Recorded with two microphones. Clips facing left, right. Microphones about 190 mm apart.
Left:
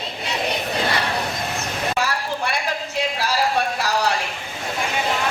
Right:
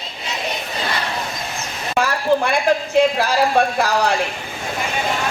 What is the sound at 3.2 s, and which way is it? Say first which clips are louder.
Speech: right 5 dB; 55° right (ahead or behind).